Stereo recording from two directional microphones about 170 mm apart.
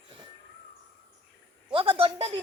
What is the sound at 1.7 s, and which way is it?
Speech, 30° right (ahead or behind).